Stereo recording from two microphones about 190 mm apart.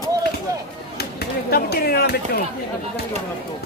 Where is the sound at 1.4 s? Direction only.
55° left (ahead or behind).